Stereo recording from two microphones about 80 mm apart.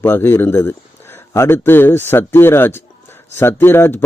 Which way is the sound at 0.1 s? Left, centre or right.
Left.